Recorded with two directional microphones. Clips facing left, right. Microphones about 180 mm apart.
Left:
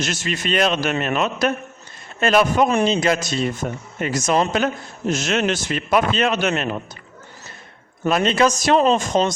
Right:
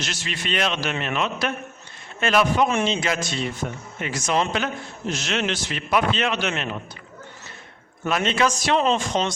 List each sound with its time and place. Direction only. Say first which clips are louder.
0.0 s a man's voice: left 6 dB; 45° left (ahead or behind)
8.0 s speech: left 4 dB; 35° left (ahead or behind)